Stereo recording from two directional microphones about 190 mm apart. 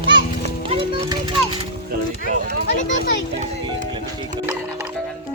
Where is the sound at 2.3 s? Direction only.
45° right (ahead or behind).